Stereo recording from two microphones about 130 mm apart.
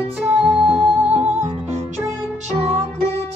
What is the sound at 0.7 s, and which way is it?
Music, 50° right (ahead or behind).